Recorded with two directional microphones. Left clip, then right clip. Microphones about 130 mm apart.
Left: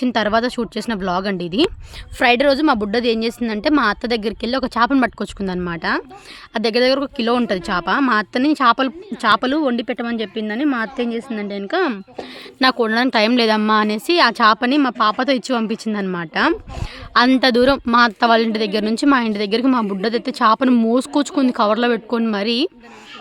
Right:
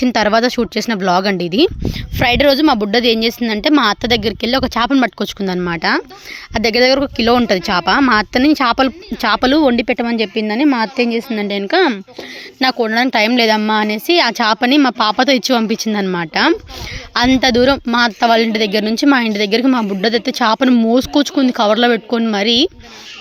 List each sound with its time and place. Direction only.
0.0 s a woman's voice: 20° right (ahead or behind)
4.9 s speech: 5° right (ahead or behind)
5.2 s a woman's voice: 20° right (ahead or behind)
12.5 s speech: 5° right (ahead or behind); by 16.6 s 25° right (ahead or behind)
17.4 s speech: 5° right (ahead or behind)